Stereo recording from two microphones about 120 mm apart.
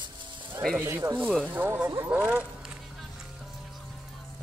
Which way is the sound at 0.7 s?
20° right (ahead or behind).